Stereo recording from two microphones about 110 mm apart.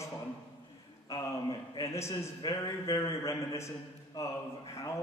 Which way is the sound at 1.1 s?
30° left (ahead or behind).